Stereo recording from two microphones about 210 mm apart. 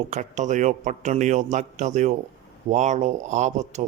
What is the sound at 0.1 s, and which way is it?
Speech, 35° right (ahead or behind).